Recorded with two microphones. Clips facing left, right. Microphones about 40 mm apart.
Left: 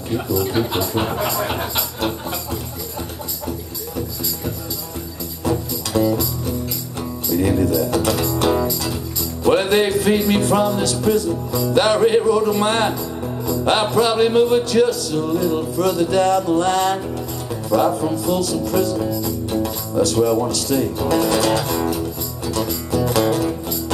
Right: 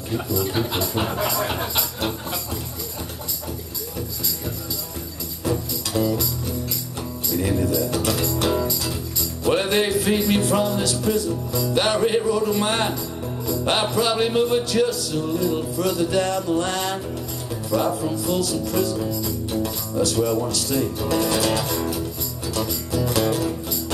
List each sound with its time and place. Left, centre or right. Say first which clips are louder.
0.1 s music: left 4 dB; centre
5.4 s music: left 3 dB; centre
7.3 s music: left 5 dB; centre